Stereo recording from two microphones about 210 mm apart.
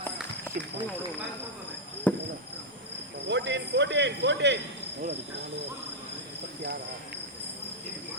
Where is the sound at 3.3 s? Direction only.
55° right (ahead or behind).